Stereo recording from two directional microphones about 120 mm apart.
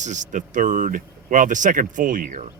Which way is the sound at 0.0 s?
90° right.